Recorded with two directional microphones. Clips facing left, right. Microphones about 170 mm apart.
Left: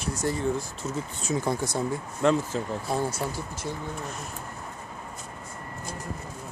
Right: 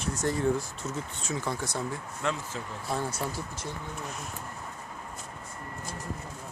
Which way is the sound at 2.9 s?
10° left (ahead or behind).